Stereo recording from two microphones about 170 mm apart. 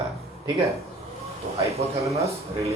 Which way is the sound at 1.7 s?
40° right (ahead or behind).